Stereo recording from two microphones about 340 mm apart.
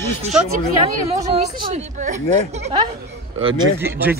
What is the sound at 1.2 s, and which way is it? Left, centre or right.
A woman's voice, centre.